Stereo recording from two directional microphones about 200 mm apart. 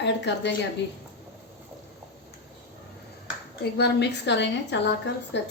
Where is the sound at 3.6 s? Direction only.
55° left (ahead or behind).